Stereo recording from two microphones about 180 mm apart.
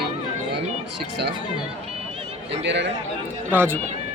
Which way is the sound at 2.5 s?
80° right.